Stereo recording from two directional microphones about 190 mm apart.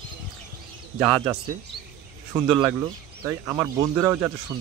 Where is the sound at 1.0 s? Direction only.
5° right (ahead or behind).